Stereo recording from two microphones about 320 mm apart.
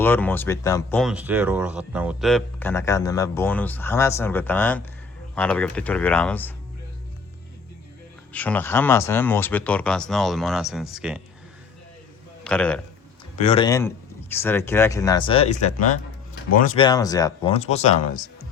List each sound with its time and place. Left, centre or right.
0.0 s speech: centre
8.3 s speech: centre
12.5 s speech: centre
13.4 s speech: centre